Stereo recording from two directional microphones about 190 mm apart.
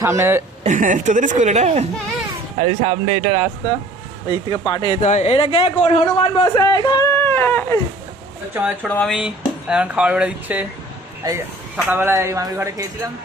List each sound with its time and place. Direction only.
0.0 s speech: 15° right (ahead or behind)
0.6 s a woman's voice: 40° right (ahead or behind)
4.3 s speech: 25° left (ahead or behind)
5.0 s a man's voice: 35° left (ahead or behind)
6.5 s speech: 20° left (ahead or behind)
7.2 s a sound: 10° left (ahead or behind)
8.8 s speech: 5° left (ahead or behind)
11.2 s speech: 20° right (ahead or behind)